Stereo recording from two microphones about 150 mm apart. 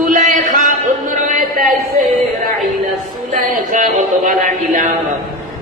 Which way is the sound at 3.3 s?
60° right (ahead or behind).